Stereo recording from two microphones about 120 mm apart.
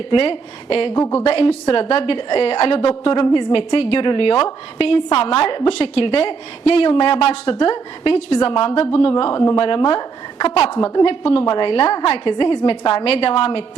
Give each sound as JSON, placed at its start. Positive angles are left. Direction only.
{"t": 0.1, "sound": "a woman's voice", "side_deg": 50}